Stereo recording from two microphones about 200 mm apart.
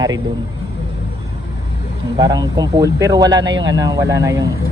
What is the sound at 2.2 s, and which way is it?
Speech, 20° right (ahead or behind).